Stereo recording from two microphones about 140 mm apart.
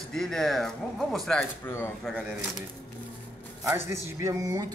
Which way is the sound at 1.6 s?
15° left (ahead or behind).